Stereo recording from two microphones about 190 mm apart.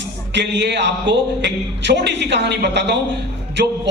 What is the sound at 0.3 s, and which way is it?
A man's voice, 65° right (ahead or behind).